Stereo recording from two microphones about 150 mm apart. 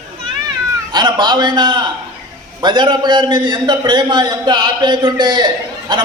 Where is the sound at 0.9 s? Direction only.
30° right (ahead or behind).